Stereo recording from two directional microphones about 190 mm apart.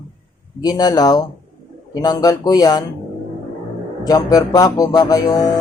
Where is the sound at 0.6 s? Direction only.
20° left (ahead or behind).